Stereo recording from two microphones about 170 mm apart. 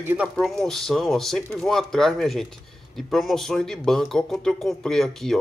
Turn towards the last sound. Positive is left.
turn(degrees=0)  # may be behind; listen again after turning